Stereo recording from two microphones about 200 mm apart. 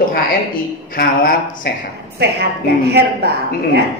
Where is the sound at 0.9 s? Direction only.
50° left (ahead or behind).